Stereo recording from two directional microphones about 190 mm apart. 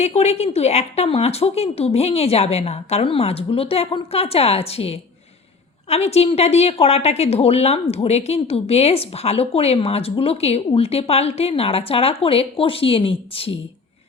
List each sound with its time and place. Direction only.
0.0 s a woman's voice: 35° left (ahead or behind)